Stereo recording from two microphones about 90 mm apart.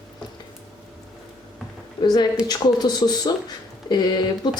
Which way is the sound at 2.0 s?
55° left (ahead or behind).